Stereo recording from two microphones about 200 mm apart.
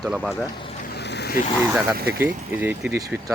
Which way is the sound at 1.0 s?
55° left (ahead or behind).